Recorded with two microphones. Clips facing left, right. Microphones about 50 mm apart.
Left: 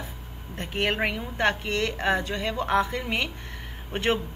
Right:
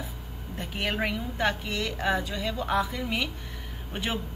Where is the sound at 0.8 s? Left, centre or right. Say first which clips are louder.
Left 2 dB; left.